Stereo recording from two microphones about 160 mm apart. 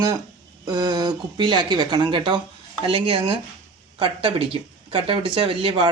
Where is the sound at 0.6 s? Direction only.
25° right (ahead or behind).